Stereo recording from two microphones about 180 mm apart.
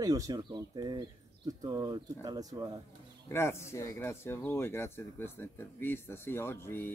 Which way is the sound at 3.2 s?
15° left (ahead or behind).